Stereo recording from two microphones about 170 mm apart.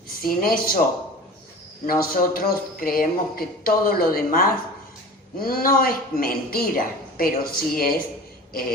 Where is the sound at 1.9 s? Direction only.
60° left (ahead or behind).